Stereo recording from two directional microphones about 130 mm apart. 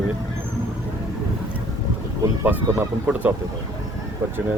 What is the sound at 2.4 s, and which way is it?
Speech, 15° right (ahead or behind).